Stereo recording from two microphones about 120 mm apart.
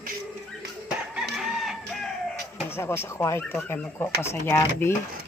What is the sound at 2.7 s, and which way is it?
Speech, 20° left (ahead or behind).